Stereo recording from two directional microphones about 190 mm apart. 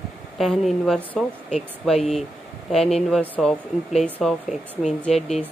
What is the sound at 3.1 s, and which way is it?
Speech, 5° left (ahead or behind).